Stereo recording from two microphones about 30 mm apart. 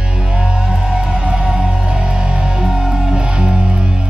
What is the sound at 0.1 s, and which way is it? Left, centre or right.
Music, right.